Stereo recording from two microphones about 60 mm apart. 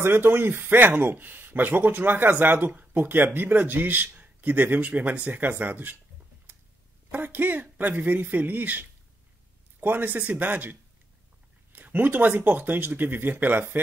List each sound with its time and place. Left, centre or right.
0.0 s speech: right
6.5 s a sound: right
7.1 s speech: right